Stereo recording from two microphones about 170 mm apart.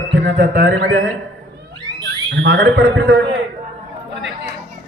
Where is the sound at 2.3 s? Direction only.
90° right.